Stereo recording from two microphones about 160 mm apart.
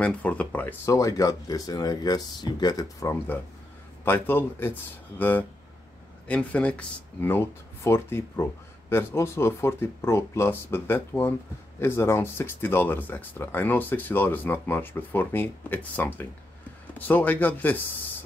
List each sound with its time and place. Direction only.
0.0 s speech: 10° left (ahead or behind)
6.2 s speech: 10° left (ahead or behind)